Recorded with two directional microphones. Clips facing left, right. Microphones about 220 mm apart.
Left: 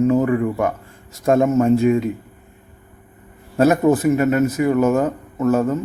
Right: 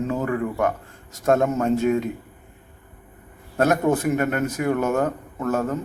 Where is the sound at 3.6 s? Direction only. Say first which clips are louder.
Left 5 dB; 5° left (ahead or behind).